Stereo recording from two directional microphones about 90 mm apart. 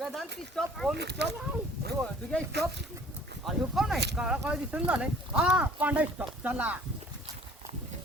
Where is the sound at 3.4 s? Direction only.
Centre (ahead or behind).